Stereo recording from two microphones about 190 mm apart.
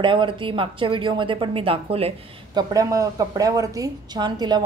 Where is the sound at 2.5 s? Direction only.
15° right (ahead or behind).